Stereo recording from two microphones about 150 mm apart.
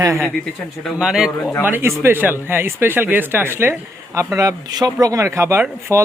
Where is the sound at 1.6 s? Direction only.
15° right (ahead or behind).